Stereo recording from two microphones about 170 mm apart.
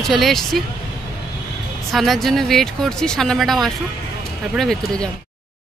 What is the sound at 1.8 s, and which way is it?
Speech, centre (ahead or behind).